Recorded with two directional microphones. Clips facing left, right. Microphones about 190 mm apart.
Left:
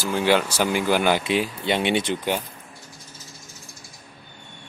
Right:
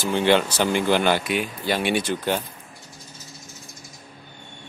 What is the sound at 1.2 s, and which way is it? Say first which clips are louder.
Speech: left 2 dB; 25° left (ahead or behind).